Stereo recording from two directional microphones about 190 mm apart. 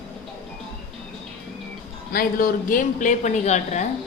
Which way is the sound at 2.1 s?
45° left (ahead or behind).